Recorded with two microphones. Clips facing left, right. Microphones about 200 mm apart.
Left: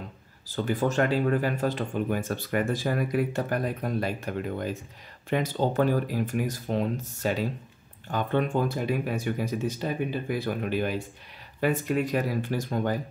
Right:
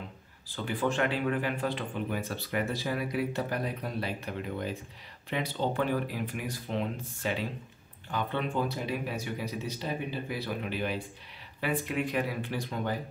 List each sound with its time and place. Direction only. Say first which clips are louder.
0.5 s speech: left 4 dB; 40° left (ahead or behind)